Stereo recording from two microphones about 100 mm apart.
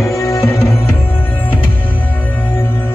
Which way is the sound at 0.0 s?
30° left (ahead or behind).